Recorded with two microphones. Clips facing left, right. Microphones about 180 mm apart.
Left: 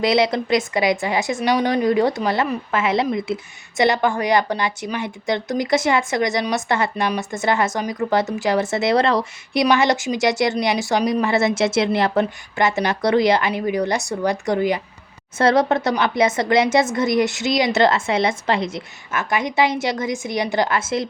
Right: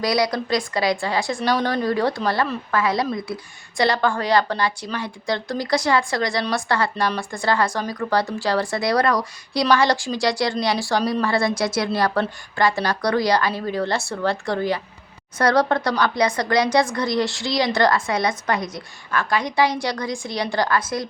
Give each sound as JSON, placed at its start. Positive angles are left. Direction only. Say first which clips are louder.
{"t": 0.0, "sound": "speech", "louder": "left 3 dB", "side_deg": 25}